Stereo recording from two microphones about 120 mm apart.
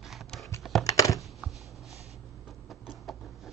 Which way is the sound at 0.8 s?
30° left (ahead or behind).